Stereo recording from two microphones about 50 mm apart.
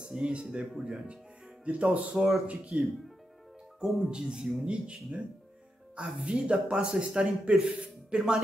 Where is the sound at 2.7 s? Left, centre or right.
Right.